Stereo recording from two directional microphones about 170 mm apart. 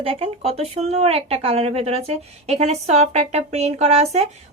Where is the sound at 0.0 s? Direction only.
35° right (ahead or behind).